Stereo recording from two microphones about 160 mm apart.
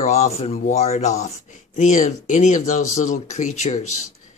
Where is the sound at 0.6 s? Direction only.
50° left (ahead or behind).